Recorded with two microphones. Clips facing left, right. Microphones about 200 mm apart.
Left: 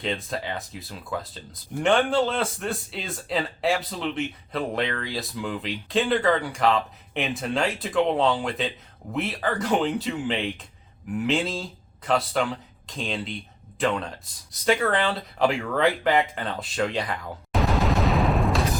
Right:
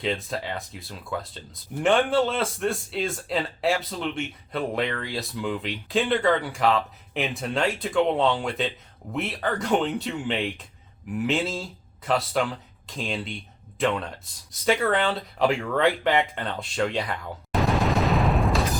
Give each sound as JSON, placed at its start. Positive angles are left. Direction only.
{"t": 0.0, "sound": "a man's voice", "side_deg": 0}